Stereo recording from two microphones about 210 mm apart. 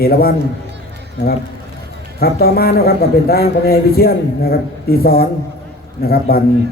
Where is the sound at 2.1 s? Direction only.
45° left (ahead or behind).